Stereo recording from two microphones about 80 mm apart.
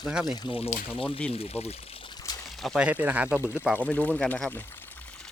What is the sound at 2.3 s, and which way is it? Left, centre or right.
Pour, left.